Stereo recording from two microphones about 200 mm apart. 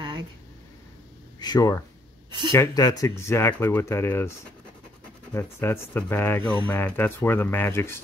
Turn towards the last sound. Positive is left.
turn(degrees=10)  # may be behind; listen again after turning